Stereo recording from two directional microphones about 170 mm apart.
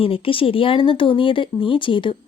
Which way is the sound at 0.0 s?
30° left (ahead or behind).